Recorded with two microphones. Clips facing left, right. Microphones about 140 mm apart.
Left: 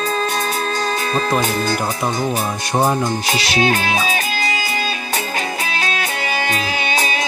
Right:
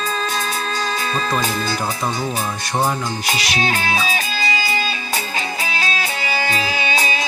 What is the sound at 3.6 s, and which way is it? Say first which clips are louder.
Music: left 2 dB; 45° left (ahead or behind).